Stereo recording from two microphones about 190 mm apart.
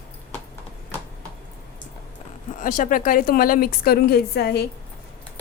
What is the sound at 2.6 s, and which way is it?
A woman's voice, 45° left (ahead or behind).